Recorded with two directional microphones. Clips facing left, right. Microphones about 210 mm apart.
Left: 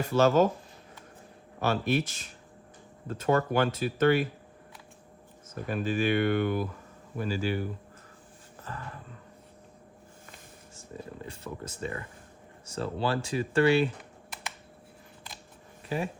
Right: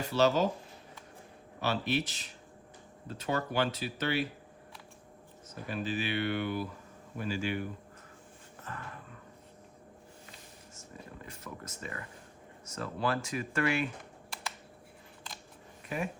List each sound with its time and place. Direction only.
0.1 s speech: 50° left (ahead or behind)
1.6 s speech: 50° left (ahead or behind)
5.6 s speech: 50° left (ahead or behind)
7.2 s speech: 40° left (ahead or behind)
10.9 s a sound: 30° left (ahead or behind)
12.6 s speech: 30° left (ahead or behind)
15.9 s speech: 30° left (ahead or behind)